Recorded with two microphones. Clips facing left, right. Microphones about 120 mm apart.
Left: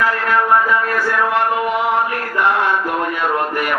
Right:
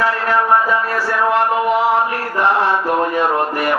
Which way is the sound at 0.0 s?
30° right (ahead or behind).